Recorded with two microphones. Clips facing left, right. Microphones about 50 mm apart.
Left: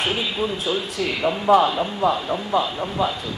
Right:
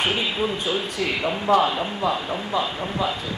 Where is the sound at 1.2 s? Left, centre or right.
Centre.